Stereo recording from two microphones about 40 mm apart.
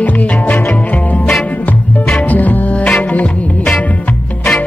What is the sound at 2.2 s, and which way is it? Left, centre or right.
Music, left.